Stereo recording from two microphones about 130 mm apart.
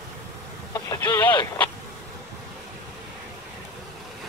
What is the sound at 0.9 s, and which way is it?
Telephone, 25° left (ahead or behind).